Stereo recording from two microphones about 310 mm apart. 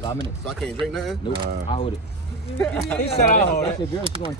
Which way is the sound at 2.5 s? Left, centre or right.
Centre.